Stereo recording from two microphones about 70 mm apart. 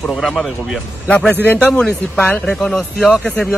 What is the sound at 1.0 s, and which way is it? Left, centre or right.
Speech, centre.